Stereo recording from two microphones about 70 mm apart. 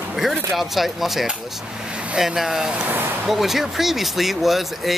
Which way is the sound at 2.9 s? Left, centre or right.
Right.